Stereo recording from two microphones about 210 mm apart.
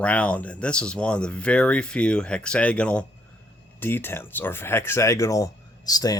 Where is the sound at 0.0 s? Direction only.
5° left (ahead or behind).